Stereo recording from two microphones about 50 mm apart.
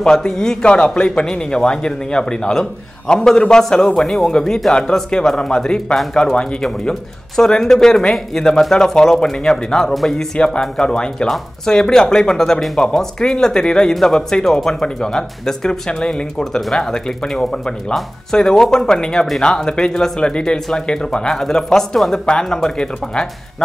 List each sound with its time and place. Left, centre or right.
0.0 s speech: centre
6.6 s speech: centre